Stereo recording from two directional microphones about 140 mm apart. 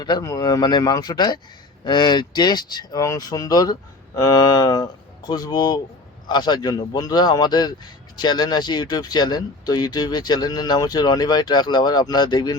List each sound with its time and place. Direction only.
0.0 s speech: 25° left (ahead or behind)